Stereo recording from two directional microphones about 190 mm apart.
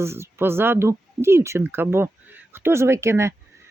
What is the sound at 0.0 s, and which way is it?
Speech, 15° right (ahead or behind).